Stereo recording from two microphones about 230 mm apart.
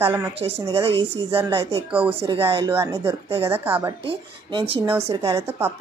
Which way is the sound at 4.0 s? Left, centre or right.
Right.